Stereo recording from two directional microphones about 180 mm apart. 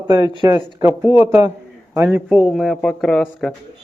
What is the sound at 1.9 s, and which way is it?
Speech, 10° right (ahead or behind).